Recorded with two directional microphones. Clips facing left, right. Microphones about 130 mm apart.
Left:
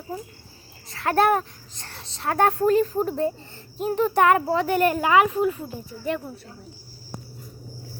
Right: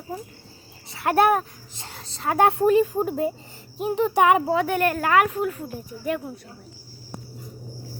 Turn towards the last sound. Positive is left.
turn(degrees=-5)  # may be behind; listen again after turning